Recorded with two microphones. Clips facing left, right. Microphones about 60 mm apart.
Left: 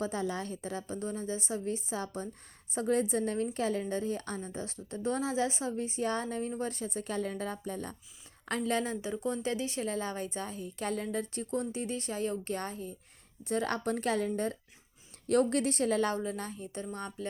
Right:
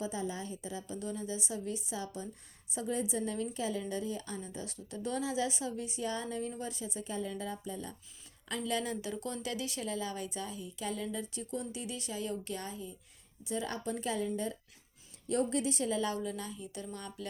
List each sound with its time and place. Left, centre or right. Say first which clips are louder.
0.0 s a woman's voice: left 4 dB; left
0.9 s a woman's voice: left 1 dB; left
15.3 s a woman's voice: left 4 dB; left
16.1 s speech: left 3 dB; left